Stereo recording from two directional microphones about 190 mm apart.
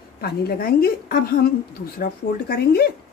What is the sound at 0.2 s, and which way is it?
Speech, 50° left (ahead or behind).